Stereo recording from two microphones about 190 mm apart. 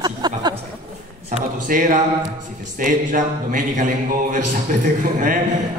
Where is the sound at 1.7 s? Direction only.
45° right (ahead or behind).